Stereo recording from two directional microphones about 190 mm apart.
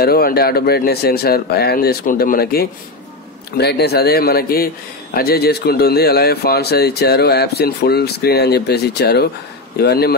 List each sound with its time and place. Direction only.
0.0 s speech: 55° left (ahead or behind)